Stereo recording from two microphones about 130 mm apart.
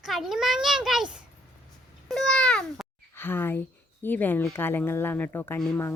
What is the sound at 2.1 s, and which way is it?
A child's voice, 5° left (ahead or behind).